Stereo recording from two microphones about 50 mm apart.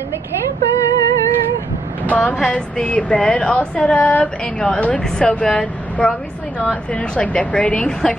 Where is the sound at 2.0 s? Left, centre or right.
Left.